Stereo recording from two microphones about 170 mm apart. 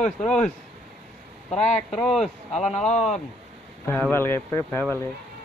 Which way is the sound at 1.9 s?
Centre (ahead or behind).